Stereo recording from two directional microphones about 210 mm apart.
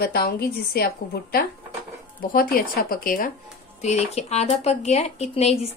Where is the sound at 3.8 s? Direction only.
30° left (ahead or behind).